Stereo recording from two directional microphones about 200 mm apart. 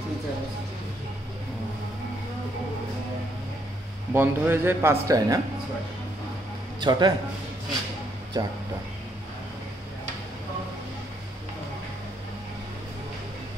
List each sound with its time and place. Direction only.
4.1 s speech: 10° right (ahead or behind)
6.8 s a man's voice: 20° right (ahead or behind)
8.3 s speech: 15° right (ahead or behind)